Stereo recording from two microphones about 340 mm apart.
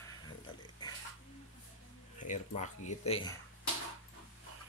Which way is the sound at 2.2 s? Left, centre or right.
Left.